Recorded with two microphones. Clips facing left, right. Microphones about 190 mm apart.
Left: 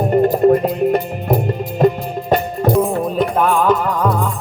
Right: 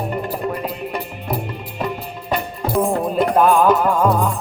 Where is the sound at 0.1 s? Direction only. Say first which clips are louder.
Left 12 dB; 45° left (ahead or behind).